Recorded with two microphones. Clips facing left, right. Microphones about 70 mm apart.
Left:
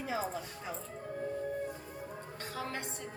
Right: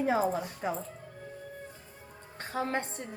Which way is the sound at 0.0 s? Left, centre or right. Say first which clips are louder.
Right 8 dB; right.